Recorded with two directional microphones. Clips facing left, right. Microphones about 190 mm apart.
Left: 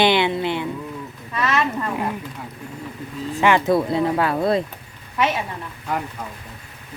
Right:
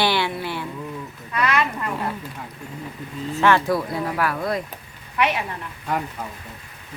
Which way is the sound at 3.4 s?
20° left (ahead or behind).